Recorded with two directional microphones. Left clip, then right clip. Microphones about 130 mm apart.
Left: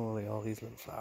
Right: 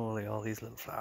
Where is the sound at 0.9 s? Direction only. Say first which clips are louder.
Right 3 dB; 10° right (ahead or behind).